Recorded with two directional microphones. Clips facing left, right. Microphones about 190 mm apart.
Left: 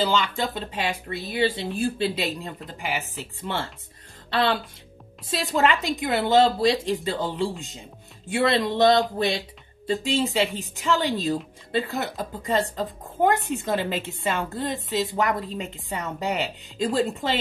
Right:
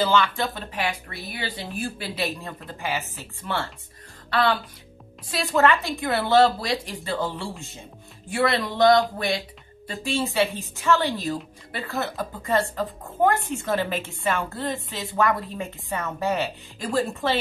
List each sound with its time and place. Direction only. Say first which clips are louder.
0.0 s a woman's voice: right 2 dB; 15° left (ahead or behind)
10.0 s a woman's voice: right 2 dB; 15° left (ahead or behind)